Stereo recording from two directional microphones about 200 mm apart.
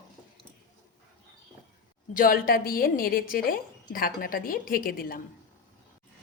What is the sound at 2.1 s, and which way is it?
A woman's voice, 45° left (ahead or behind).